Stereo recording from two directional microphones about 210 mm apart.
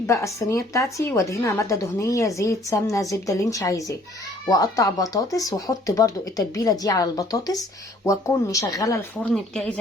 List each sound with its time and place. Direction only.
0.1 s speech: 15° left (ahead or behind)
9.3 s speech: centre (ahead or behind)